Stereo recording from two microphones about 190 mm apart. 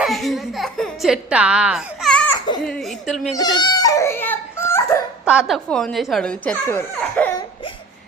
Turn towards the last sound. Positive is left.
turn(degrees=10)  # may be behind; listen again after turning